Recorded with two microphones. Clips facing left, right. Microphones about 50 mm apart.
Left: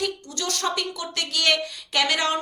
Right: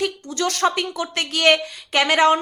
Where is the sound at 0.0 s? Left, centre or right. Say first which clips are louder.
Right 5 dB; right.